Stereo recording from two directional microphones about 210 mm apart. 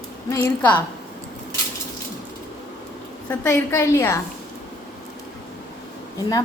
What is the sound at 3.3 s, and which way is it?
Speech, 10° left (ahead or behind).